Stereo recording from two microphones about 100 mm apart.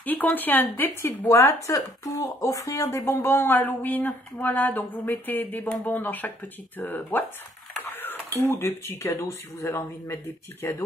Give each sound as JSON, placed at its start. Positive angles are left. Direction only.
{"t": 0.0, "sound": "speech", "side_deg": 15}
{"t": 1.2, "sound": "speech", "side_deg": 35}
{"t": 7.9, "sound": "cutlery", "side_deg": 20}
{"t": 8.4, "sound": "speech", "side_deg": 25}